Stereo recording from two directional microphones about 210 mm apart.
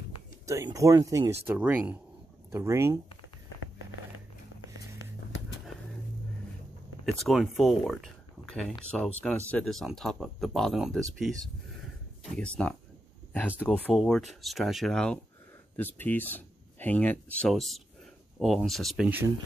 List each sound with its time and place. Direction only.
0.5 s speech: 15° right (ahead or behind)
7.2 s speech: centre (ahead or behind)